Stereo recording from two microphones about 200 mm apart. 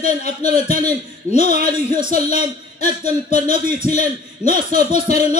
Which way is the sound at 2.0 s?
45° right (ahead or behind).